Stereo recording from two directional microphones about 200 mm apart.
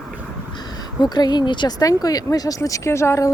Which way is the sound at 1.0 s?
20° left (ahead or behind).